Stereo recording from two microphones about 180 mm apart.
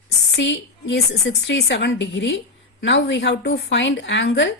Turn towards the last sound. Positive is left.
turn(degrees=85)